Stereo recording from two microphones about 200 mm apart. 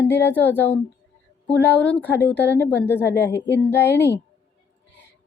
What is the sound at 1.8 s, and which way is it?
A woman's voice, 5° left (ahead or behind).